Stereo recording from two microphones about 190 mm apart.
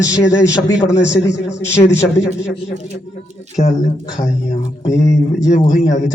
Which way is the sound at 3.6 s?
35° left (ahead or behind).